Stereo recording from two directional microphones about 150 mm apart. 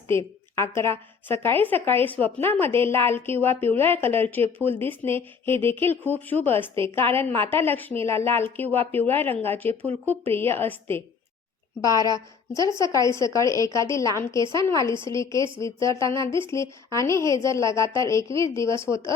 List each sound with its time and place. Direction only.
0.1 s a woman's voice: 15° left (ahead or behind)
4.4 s speech: 40° right (ahead or behind)
4.9 s a woman's voice: 15° left (ahead or behind)